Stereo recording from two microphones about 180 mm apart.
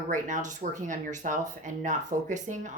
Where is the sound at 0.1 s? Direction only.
45° right (ahead or behind).